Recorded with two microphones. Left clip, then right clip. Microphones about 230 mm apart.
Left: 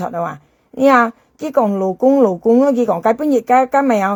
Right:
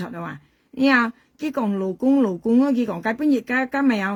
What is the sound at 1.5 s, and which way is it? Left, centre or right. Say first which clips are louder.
Speech: left 10 dB; centre.